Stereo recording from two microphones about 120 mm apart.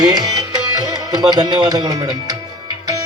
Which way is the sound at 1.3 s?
35° right (ahead or behind).